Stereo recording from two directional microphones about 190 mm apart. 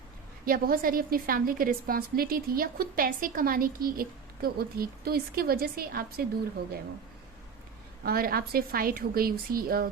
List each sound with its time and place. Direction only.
0.4 s a woman's voice: 50° right (ahead or behind)
8.0 s a woman's voice: 50° right (ahead or behind)